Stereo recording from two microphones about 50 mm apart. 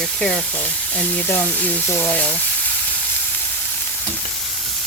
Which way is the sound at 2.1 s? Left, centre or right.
Left.